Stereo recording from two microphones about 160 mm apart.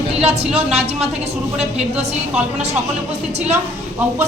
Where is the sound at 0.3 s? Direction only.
40° right (ahead or behind).